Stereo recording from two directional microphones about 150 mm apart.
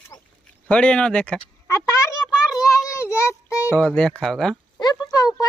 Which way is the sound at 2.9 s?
20° left (ahead or behind).